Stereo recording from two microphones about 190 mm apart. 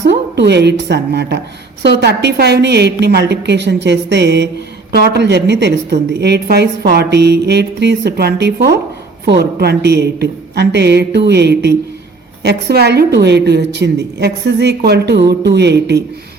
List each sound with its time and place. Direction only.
0.0 s a woman's voice: 65° right (ahead or behind)